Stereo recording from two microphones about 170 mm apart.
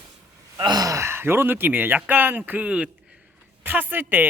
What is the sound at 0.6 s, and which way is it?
Speech, 25° right (ahead or behind).